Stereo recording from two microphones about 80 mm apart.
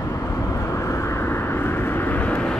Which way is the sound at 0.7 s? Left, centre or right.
Left.